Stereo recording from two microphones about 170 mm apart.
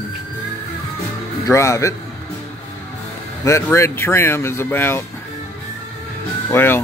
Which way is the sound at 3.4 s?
15° left (ahead or behind).